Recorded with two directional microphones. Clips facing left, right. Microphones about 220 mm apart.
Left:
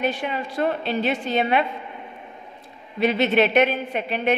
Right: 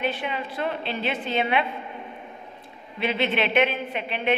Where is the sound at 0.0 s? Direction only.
45° left (ahead or behind).